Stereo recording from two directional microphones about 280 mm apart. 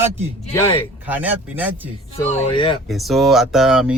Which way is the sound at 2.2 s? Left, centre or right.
Centre.